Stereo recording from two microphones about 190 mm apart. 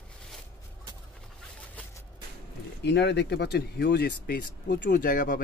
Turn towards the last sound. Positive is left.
turn(degrees=45)  # may be behind; listen again after turning